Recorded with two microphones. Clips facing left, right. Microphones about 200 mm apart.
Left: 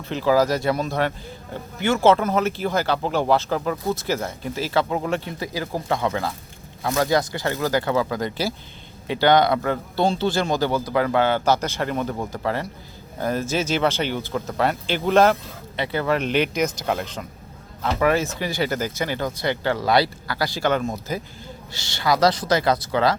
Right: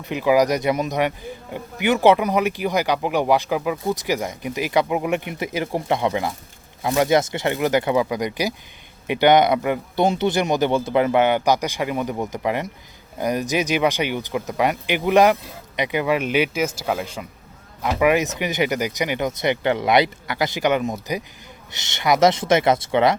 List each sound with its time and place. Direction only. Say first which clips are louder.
0.0 s speech: right 1 dB; 15° right (ahead or behind)